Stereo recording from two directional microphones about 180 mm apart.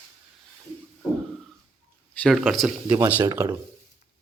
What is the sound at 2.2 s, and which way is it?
Speech, centre (ahead or behind).